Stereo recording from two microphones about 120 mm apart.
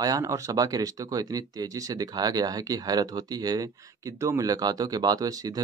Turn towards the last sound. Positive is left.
turn(degrees=-30)  # may be behind; listen again after turning